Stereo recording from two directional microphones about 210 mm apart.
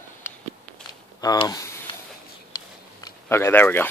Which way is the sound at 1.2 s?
20° left (ahead or behind).